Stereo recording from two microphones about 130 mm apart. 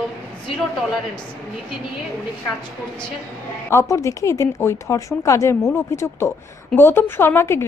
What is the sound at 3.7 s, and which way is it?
A woman's voice, 20° left (ahead or behind).